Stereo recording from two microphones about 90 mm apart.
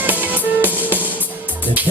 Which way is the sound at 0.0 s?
20° right (ahead or behind).